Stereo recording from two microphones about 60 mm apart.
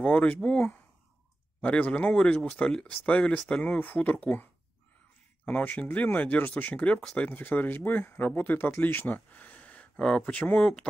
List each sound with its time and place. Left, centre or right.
0.0 s speech: left